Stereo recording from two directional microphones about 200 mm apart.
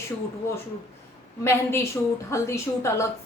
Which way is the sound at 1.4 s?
10° left (ahead or behind).